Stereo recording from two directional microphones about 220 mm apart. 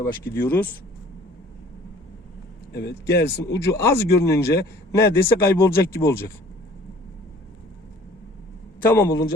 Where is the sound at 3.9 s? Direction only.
45° left (ahead or behind).